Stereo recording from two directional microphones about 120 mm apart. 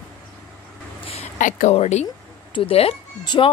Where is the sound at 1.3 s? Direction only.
85° left; by 2.1 s 65° left (ahead or behind).